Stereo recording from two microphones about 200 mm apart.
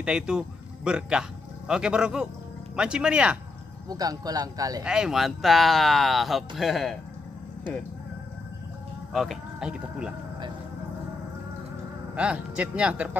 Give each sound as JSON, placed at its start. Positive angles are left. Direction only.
{"t": 0.0, "sound": "a man's voice", "side_deg": -5}
{"t": 3.9, "sound": "speech", "side_deg": -20}
{"t": 4.8, "sound": "speech", "side_deg": -5}
{"t": 9.1, "sound": "speech", "side_deg": 0}
{"t": 12.2, "sound": "speech", "side_deg": -5}